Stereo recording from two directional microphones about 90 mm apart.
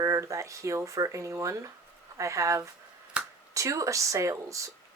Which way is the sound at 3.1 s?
10° right (ahead or behind).